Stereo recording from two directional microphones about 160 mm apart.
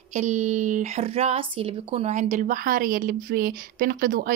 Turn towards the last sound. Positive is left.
turn(degrees=-60)  # may be behind; listen again after turning